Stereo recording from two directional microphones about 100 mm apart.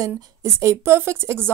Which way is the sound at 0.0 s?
30° right (ahead or behind).